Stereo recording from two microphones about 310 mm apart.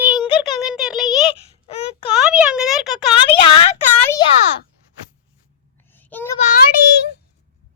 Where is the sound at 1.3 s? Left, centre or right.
Centre.